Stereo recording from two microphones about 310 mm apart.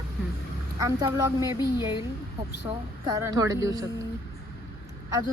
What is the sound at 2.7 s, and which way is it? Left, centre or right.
Speech, centre.